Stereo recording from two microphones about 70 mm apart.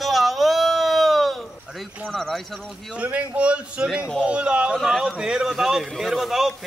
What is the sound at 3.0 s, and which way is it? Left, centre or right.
A man's voice, centre.